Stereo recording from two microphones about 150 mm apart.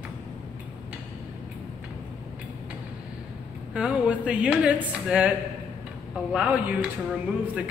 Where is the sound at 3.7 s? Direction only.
10° right (ahead or behind).